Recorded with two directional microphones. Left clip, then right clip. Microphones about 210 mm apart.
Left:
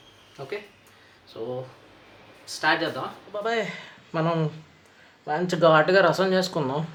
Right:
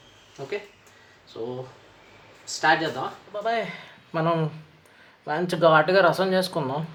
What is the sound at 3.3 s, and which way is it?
Speech, 10° left (ahead or behind).